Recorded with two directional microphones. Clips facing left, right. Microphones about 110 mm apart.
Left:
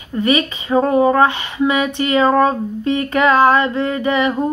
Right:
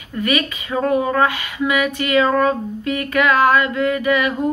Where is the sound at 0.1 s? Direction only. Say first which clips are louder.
Left 4 dB; 25° left (ahead or behind).